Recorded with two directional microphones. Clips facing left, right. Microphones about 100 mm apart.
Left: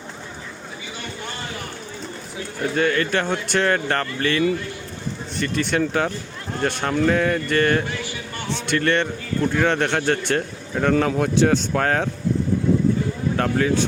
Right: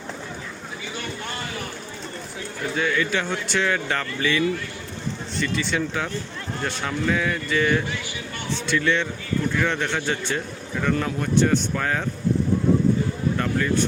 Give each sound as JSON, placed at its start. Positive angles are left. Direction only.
{"t": 2.7, "sound": "speech", "side_deg": 55}
{"t": 7.0, "sound": "speech", "side_deg": 50}
{"t": 10.8, "sound": "speech", "side_deg": 85}
{"t": 11.7, "sound": "speech", "side_deg": 65}
{"t": 13.3, "sound": "speech", "side_deg": 70}